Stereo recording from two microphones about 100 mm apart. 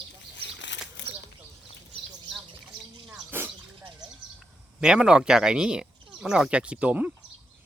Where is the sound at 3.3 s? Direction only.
20° right (ahead or behind).